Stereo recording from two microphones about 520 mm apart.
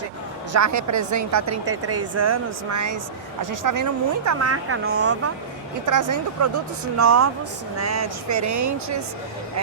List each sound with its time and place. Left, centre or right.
0.5 s speech: right